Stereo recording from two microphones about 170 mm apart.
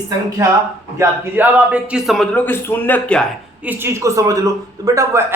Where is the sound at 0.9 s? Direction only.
10° right (ahead or behind).